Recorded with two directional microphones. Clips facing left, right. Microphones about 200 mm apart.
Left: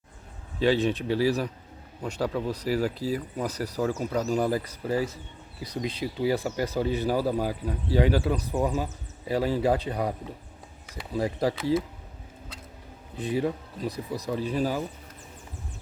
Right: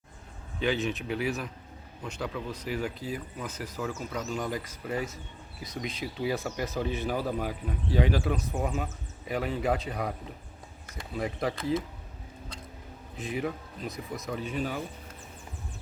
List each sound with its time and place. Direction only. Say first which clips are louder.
0.6 s speech: left 6 dB; 30° left (ahead or behind)
11.2 s speech: left 5 dB; 30° left (ahead or behind)
13.1 s speech: left 5 dB; 30° left (ahead or behind)